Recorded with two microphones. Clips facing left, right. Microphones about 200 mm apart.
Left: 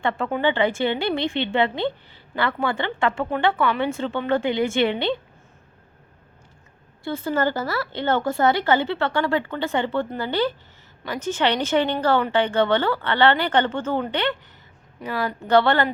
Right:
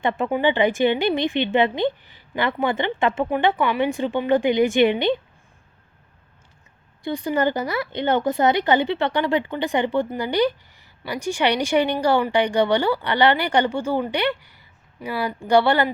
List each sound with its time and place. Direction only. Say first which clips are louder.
0.0 s a woman's voice: right 2 dB; 15° right (ahead or behind)
7.0 s a woman's voice: right 1 dB; 15° right (ahead or behind)